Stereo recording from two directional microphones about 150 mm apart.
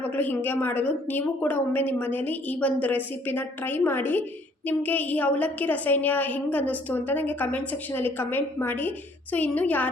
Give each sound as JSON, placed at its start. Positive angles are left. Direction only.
{"t": 0.0, "sound": "a woman's voice", "side_deg": 10}